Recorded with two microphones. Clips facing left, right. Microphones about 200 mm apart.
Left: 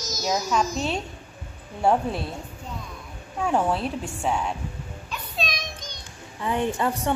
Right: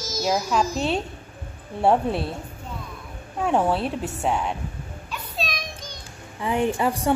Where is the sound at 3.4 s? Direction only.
Centre (ahead or behind).